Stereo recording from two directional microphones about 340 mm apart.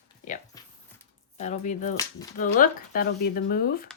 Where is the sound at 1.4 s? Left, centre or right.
Left.